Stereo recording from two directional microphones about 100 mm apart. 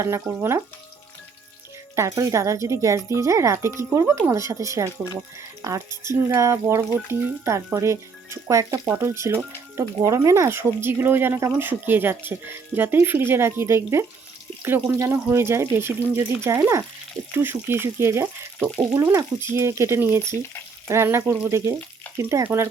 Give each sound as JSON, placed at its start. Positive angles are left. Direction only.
{"t": 0.3, "sound": "speech", "side_deg": -25}
{"t": 2.0, "sound": "speech", "side_deg": -30}
{"t": 11.3, "sound": "speech", "side_deg": -30}
{"t": 11.6, "sound": "speech", "side_deg": -20}